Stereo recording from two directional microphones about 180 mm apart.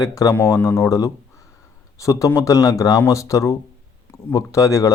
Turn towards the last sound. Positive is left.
turn(degrees=20)  # may be behind; listen again after turning